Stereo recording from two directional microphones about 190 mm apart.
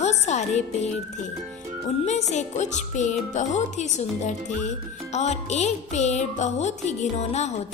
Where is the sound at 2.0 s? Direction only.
35° left (ahead or behind).